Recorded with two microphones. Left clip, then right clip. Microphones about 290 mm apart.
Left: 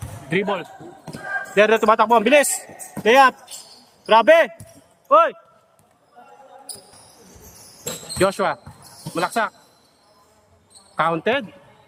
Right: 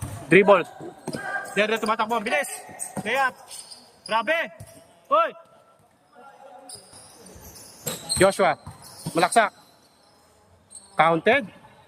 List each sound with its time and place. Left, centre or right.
0.3 s speech: centre
1.5 s a man's voice: centre
8.2 s speech: centre
10.9 s speech: centre